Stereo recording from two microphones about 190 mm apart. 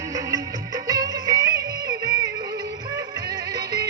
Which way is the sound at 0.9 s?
20° right (ahead or behind).